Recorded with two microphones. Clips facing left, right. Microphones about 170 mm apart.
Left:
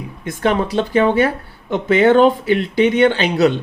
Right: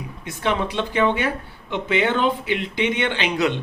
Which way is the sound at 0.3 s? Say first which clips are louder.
Left 6 dB; 45° left (ahead or behind).